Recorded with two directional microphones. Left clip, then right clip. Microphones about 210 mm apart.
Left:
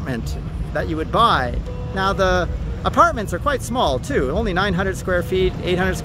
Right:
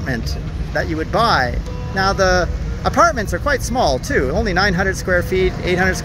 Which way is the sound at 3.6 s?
15° left (ahead or behind).